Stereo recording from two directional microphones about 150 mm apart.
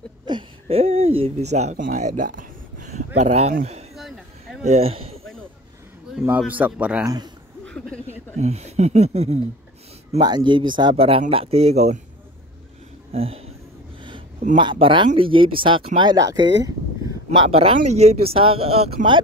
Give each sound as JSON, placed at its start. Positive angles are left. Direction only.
{"t": 0.2, "sound": "a sound", "side_deg": -30}
{"t": 3.2, "sound": "speech", "side_deg": -50}
{"t": 3.9, "sound": "a sound", "side_deg": 0}
{"t": 4.6, "sound": "speech", "side_deg": -40}
{"t": 6.2, "sound": "a man's voice", "side_deg": -10}
{"t": 8.4, "sound": "speech", "side_deg": -45}
{"t": 10.2, "sound": "speech", "side_deg": -30}
{"t": 13.1, "sound": "speech", "side_deg": -40}
{"t": 14.6, "sound": "speech", "side_deg": -35}
{"t": 17.4, "sound": "speech", "side_deg": -40}